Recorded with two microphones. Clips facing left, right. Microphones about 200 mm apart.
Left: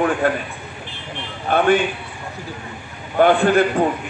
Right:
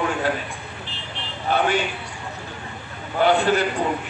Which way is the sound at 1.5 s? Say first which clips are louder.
Left 3 dB; 55° left (ahead or behind).